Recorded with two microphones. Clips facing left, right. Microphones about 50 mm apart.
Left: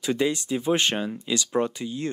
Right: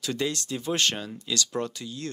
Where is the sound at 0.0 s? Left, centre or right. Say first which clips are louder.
Left 5 dB; centre.